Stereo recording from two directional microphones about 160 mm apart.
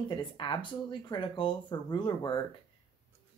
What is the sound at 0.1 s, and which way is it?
Speech, 30° left (ahead or behind).